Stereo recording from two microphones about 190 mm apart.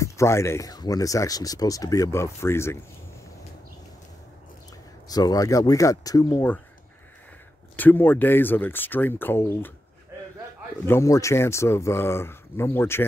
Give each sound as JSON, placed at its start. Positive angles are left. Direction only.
{"t": 0.0, "sound": "speech", "side_deg": 15}
{"t": 5.0, "sound": "speech", "side_deg": 20}
{"t": 7.7, "sound": "speech", "side_deg": 10}
{"t": 10.9, "sound": "speech", "side_deg": 15}